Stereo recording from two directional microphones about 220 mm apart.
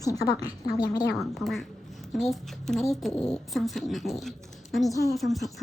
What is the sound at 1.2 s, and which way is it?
A woman's voice, centre (ahead or behind).